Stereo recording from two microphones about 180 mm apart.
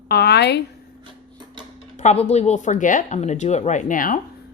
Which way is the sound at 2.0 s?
40° left (ahead or behind).